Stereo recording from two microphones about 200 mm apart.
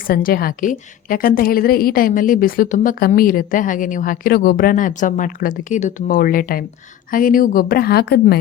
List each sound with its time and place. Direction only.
0.1 s a woman's voice: 45° left (ahead or behind)